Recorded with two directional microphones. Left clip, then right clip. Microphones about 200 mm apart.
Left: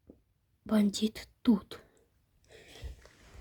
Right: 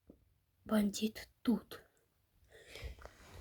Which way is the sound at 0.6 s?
20° left (ahead or behind).